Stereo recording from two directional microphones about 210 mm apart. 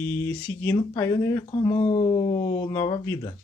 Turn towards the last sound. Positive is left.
turn(degrees=20)  # may be behind; listen again after turning